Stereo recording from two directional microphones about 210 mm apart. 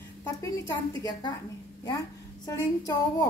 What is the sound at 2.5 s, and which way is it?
Speech, 15° left (ahead or behind).